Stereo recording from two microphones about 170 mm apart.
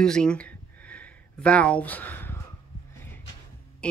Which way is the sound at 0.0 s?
5° left (ahead or behind).